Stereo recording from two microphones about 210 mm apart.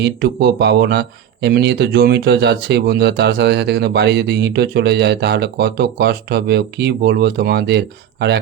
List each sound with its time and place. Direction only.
0.0 s speech: 55° right (ahead or behind)